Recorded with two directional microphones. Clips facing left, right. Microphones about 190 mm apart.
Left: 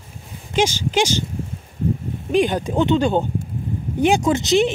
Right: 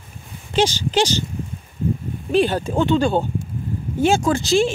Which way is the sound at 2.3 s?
15° left (ahead or behind).